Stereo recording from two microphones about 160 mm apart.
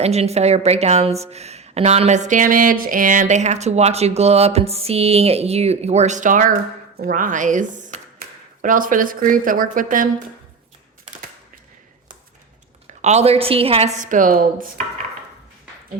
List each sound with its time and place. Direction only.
0.0 s a woman's voice: 40° right (ahead or behind)
6.9 s speech: 65° right (ahead or behind)
12.9 s a woman's voice: 45° right (ahead or behind)